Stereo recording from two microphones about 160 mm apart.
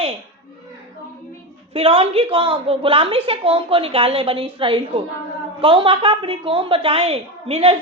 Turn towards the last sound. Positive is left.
turn(degrees=-35)  # may be behind; listen again after turning